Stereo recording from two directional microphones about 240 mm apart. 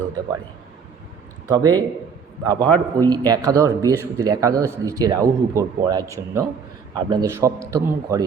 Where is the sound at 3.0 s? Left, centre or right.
Centre.